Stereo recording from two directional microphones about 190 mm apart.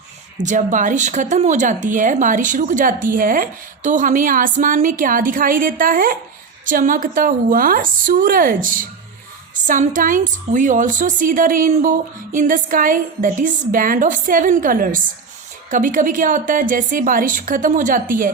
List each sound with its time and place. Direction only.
0.3 s a woman's voice: 40° right (ahead or behind)